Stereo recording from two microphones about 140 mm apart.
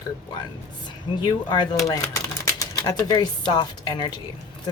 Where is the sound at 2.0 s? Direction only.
25° left (ahead or behind).